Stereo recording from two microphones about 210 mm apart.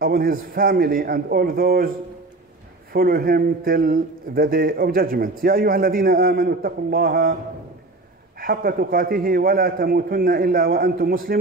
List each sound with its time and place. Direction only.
0.0 s a man's voice: 45° right (ahead or behind)
2.9 s a man's voice: 45° right (ahead or behind)
8.4 s a man's voice: 45° right (ahead or behind)